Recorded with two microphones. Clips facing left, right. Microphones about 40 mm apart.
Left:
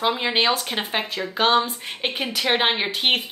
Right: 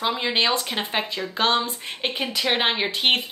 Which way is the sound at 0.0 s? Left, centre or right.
Centre.